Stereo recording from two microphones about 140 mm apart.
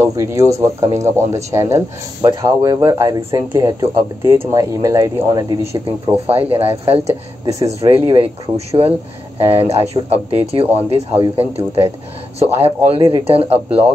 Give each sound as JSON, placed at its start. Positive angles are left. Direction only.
{"t": 0.0, "sound": "speech", "side_deg": -20}
{"t": 6.2, "sound": "speech", "side_deg": -45}
{"t": 7.4, "sound": "speech", "side_deg": -25}
{"t": 8.0, "sound": "speech", "side_deg": -40}
{"t": 12.9, "sound": "speech", "side_deg": -30}
{"t": 13.2, "sound": "speech", "side_deg": -45}